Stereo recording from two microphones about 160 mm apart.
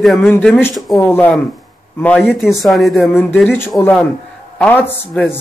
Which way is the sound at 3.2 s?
10° left (ahead or behind).